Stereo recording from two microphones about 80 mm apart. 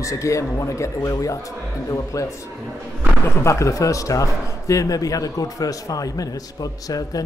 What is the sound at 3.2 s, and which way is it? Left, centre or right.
A man's voice, left.